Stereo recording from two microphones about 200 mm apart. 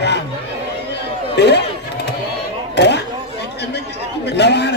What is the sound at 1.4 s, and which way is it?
Speech, 60° left (ahead or behind).